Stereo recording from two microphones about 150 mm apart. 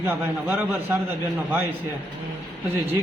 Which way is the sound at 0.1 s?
15° right (ahead or behind).